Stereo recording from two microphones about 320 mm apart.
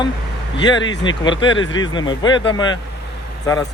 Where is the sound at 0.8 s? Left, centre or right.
Left.